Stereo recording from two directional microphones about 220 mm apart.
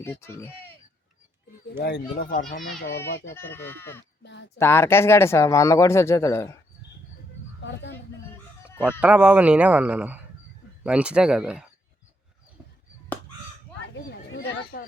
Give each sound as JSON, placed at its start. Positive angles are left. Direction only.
{"t": 0.0, "sound": "speech", "side_deg": 10}
{"t": 1.8, "sound": "a child's voice", "side_deg": 45}
{"t": 3.3, "sound": "speech", "side_deg": 10}
{"t": 4.2, "sound": "a sound", "side_deg": 50}
{"t": 4.5, "sound": "speech", "side_deg": 10}
{"t": 7.6, "sound": "a sound", "side_deg": 50}
{"t": 8.8, "sound": "speech", "side_deg": -5}
{"t": 13.9, "sound": "chatter", "side_deg": 50}
{"t": 14.7, "sound": "speech", "side_deg": 40}